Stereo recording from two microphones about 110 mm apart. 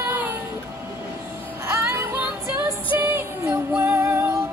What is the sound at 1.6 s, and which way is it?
Music, 25° right (ahead or behind).